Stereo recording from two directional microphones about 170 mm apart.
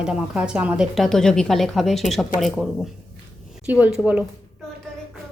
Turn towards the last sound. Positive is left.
turn(degrees=-10)  # may be behind; listen again after turning